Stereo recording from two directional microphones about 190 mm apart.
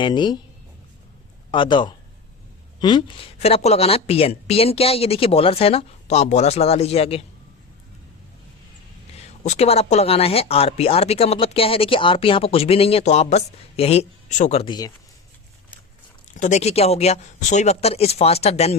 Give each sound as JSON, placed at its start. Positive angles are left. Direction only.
{"t": 0.0, "sound": "speech", "side_deg": 25}
{"t": 1.5, "sound": "speech", "side_deg": 25}
{"t": 9.1, "sound": "speech", "side_deg": 35}
{"t": 16.3, "sound": "speech", "side_deg": 40}